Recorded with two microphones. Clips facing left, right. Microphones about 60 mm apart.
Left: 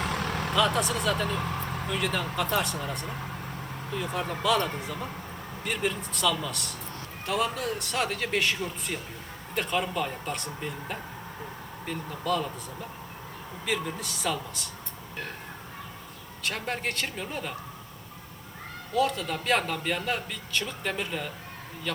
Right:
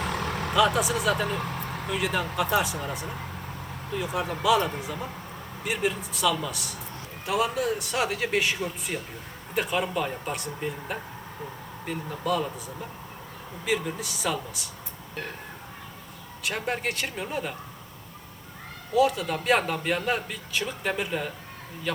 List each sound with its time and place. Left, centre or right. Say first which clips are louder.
0.2 s vehicle: right 1 dB; left
0.5 s a man's voice: right 3 dB; centre
3.9 s a man's voice: right 2 dB; centre
13.7 s a man's voice: right 3 dB; centre
16.4 s a man's voice: right 2 dB; centre
18.9 s a man's voice: right 4 dB; centre